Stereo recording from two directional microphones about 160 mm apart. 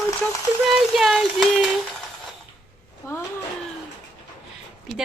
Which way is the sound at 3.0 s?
20° left (ahead or behind).